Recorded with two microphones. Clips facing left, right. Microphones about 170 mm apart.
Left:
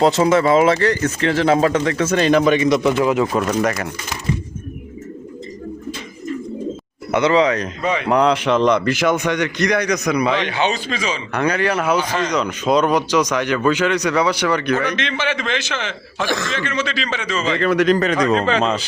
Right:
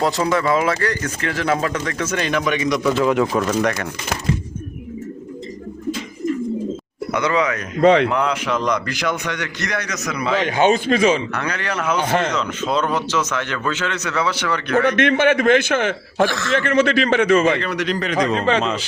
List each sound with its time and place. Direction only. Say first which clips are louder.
0.0 s speech: left 5 dB; 20° left (ahead or behind)
2.9 s speech: even; 10° left (ahead or behind)
7.1 s speech: left 5 dB; 25° left (ahead or behind)
7.8 s a man's voice: right 8 dB; 70° right (ahead or behind)
8.1 s speech: left 5 dB; 35° left (ahead or behind); by 10.3 s 20° left (ahead or behind)
10.3 s a man's voice: right 4 dB; 45° right (ahead or behind)
11.3 s speech: left 6 dB; 15° left (ahead or behind)
12.0 s speech: right 2 dB; 55° right (ahead or behind)
12.3 s speech: left 4 dB; 15° left (ahead or behind)
14.8 s a man's voice: right 6 dB; 55° right (ahead or behind)
16.3 s speech: right 1 dB; 15° left (ahead or behind)
16.6 s speech: right 7 dB; 55° right (ahead or behind)
17.6 s a man's voice: left 7 dB; 45° left (ahead or behind)